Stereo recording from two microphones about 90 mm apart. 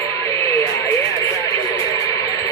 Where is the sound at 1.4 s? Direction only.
40° left (ahead or behind).